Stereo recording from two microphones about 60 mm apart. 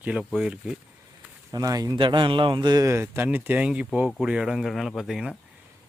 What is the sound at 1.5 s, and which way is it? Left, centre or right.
Speech, right.